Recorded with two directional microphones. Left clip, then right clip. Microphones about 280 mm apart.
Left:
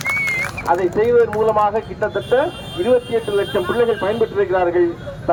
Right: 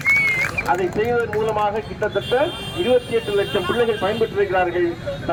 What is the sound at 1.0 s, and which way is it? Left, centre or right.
Speech, centre.